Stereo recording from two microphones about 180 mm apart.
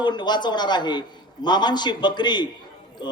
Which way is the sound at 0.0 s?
25° left (ahead or behind).